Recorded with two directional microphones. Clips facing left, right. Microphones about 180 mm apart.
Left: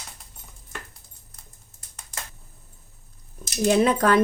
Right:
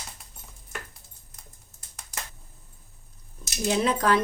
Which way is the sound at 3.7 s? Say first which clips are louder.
Left 4 dB; 55° left (ahead or behind).